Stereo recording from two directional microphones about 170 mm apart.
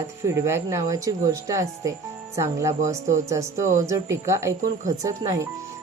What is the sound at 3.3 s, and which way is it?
Speech, 15° right (ahead or behind).